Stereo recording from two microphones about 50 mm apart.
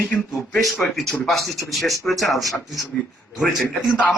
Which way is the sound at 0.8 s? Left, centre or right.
Centre.